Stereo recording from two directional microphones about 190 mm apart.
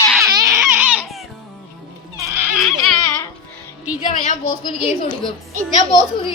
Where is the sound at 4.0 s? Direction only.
40° left (ahead or behind).